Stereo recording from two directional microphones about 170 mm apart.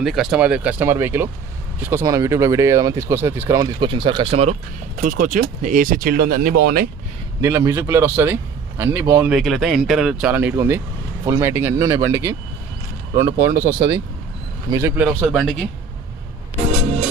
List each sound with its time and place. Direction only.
0.0 s speech: centre (ahead or behind); by 4.5 s 35° right (ahead or behind)
5.0 s speech: 50° right (ahead or behind)
7.4 s speech: 15° right (ahead or behind)
9.4 s speech: centre (ahead or behind); by 15.0 s 15° right (ahead or behind)
15.3 s speech: centre (ahead or behind)